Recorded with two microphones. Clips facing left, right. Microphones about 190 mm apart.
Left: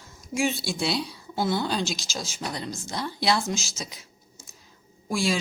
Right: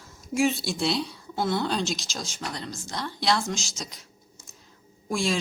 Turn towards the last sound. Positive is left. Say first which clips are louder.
# left 1 dB
turn(degrees=0)  # may be behind; listen again after turning